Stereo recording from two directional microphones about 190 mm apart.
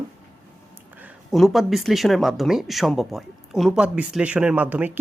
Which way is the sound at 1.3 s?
Centre (ahead or behind).